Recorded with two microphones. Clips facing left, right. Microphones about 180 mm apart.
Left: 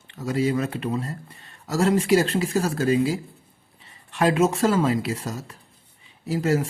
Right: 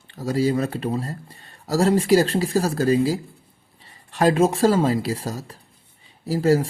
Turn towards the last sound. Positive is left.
turn(degrees=-35)  # may be behind; listen again after turning